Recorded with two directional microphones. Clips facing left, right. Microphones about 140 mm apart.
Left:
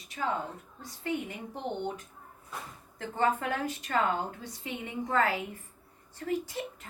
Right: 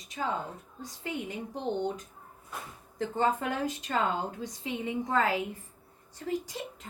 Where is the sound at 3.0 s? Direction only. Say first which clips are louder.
Right 1 dB; 15° right (ahead or behind).